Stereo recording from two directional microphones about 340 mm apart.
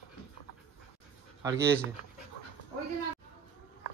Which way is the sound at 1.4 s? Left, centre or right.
Centre.